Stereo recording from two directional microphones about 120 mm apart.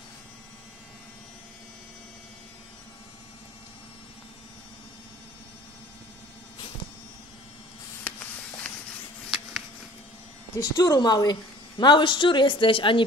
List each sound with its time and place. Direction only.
8.0 s spray: 15° left (ahead or behind)
10.5 s a woman's voice: 30° left (ahead or behind); by 13.0 s 45° left (ahead or behind)